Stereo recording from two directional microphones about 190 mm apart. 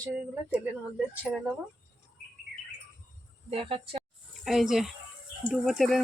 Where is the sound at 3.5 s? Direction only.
30° right (ahead or behind).